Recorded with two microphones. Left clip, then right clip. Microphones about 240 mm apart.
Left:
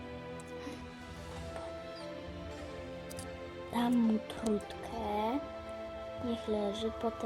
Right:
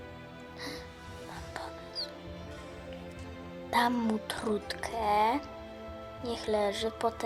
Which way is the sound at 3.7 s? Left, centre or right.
Right.